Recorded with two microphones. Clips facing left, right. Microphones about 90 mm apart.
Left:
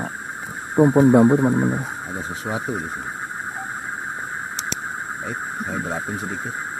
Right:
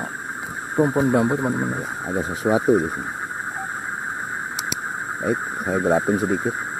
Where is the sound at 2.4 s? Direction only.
25° right (ahead or behind).